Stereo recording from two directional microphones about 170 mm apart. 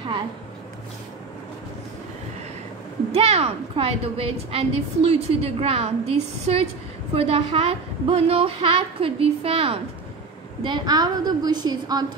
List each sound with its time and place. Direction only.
3.1 s a woman's voice: 35° right (ahead or behind)